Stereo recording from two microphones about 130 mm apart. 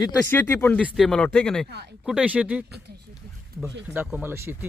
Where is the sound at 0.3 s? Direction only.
15° left (ahead or behind).